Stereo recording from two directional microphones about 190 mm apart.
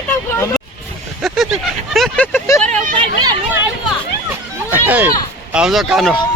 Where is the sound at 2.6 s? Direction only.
40° right (ahead or behind).